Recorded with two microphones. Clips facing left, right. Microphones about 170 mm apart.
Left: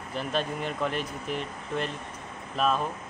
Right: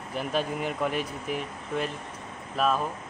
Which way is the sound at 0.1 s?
10° right (ahead or behind).